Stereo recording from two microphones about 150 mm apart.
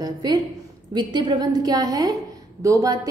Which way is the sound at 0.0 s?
25° right (ahead or behind).